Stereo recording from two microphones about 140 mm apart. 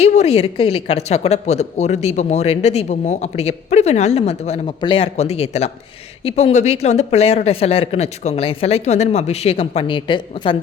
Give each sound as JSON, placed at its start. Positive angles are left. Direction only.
{"t": 0.0, "sound": "speech", "side_deg": 50}
{"t": 4.6, "sound": "speech", "side_deg": 35}